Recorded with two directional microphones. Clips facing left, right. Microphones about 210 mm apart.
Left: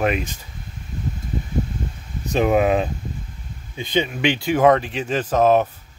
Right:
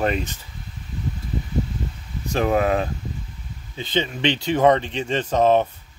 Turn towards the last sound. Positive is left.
turn(degrees=5)  # may be behind; listen again after turning